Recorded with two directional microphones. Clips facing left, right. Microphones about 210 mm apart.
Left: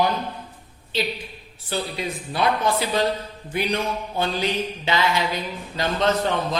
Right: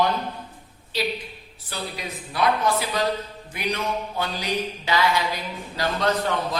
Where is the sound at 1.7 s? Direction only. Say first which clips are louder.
Left 5 dB; 30° left (ahead or behind).